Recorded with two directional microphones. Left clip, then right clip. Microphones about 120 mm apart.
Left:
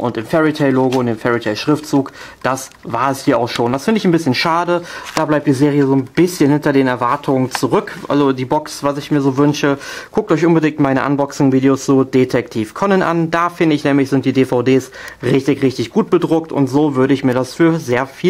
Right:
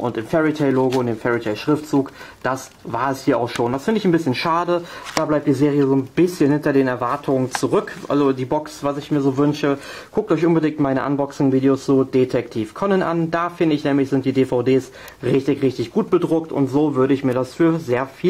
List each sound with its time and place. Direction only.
0.0 s speech: 35° left (ahead or behind)